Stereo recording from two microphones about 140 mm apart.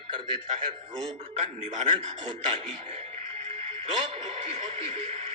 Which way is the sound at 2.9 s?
45° right (ahead or behind).